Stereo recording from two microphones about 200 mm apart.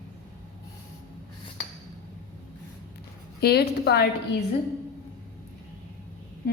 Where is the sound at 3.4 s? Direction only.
55° left (ahead or behind).